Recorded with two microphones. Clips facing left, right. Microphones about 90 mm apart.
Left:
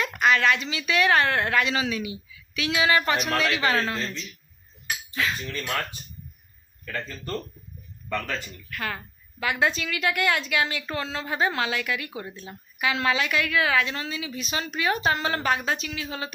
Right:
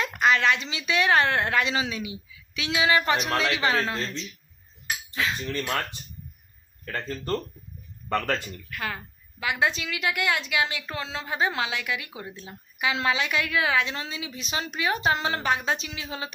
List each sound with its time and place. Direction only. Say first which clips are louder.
0.0 s a woman's voice: left 1 dB; 25° right (ahead or behind)
6.8 s speech: right 2 dB; 40° right (ahead or behind)
8.7 s a woman's voice: left 1 dB; 10° right (ahead or behind)